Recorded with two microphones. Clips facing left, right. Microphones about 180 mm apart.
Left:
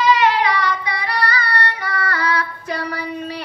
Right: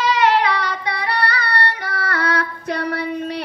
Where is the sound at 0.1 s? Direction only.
60° right (ahead or behind).